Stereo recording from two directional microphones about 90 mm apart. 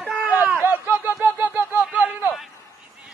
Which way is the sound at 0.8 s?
20° right (ahead or behind).